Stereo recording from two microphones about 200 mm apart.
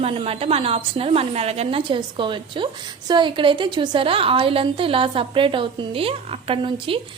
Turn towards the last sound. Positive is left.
turn(degrees=-25)  # may be behind; listen again after turning